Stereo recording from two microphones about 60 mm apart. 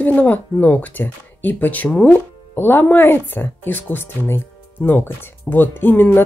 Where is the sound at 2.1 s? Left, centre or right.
Left.